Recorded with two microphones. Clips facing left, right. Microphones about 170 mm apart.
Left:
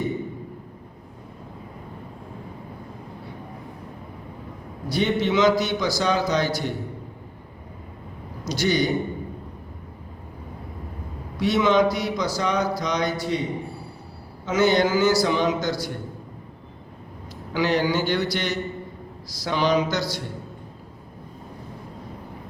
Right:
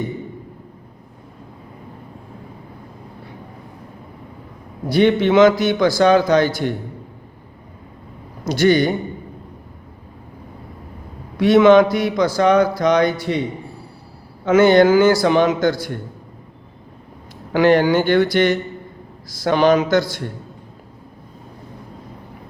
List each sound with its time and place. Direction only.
4.9 s speech: 60° right (ahead or behind)
8.4 s speech: 55° right (ahead or behind)
11.3 s speech: 55° right (ahead or behind)
14.4 s speech: 55° right (ahead or behind)
17.5 s a man's voice: 55° right (ahead or behind)